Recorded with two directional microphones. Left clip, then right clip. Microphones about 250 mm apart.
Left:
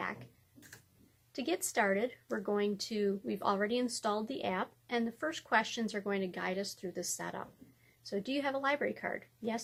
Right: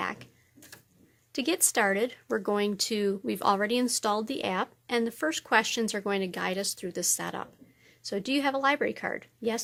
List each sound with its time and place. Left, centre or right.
1.3 s speech: right